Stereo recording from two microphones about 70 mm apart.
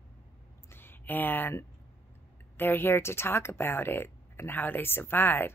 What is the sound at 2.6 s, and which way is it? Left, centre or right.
Speech, left.